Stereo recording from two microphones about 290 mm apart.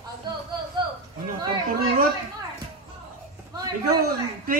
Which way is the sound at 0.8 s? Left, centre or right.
Centre.